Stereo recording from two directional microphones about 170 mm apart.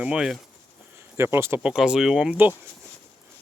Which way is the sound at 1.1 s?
15° right (ahead or behind).